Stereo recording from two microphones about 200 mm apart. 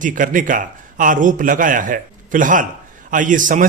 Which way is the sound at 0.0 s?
40° right (ahead or behind).